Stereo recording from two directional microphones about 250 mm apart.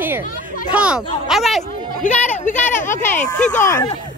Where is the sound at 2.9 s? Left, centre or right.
Centre.